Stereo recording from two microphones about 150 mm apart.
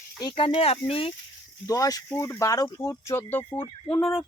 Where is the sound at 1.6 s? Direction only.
25° left (ahead or behind).